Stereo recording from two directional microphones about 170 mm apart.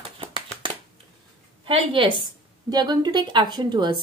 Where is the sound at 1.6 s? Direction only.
30° right (ahead or behind).